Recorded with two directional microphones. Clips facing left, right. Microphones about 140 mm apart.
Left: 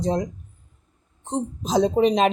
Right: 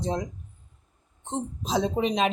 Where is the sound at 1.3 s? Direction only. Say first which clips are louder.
Left 4 dB; 40° left (ahead or behind).